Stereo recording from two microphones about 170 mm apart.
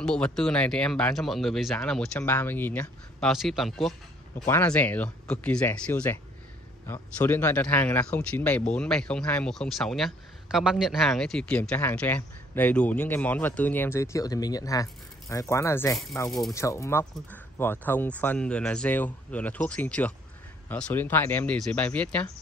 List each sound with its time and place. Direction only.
0.0 s speech: 5° left (ahead or behind)
3.3 s speech: centre (ahead or behind)
16.3 s speech: centre (ahead or behind)
16.5 s speech: 20° left (ahead or behind)